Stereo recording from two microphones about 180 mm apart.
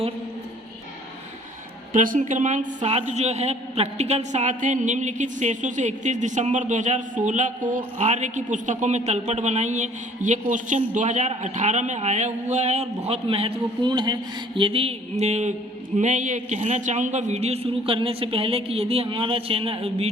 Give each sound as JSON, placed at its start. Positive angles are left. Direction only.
{"t": 1.9, "sound": "a man's voice", "side_deg": -45}